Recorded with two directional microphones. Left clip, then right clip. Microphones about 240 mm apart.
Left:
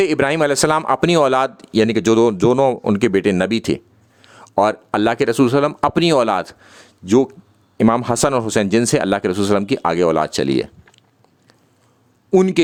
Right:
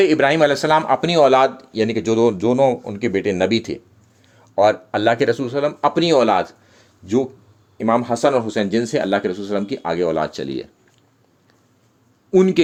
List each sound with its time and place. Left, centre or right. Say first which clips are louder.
0.0 s a man's voice: right 2 dB; left
12.3 s speech: even; left